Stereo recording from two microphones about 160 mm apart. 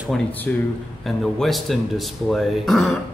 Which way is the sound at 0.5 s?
10° left (ahead or behind).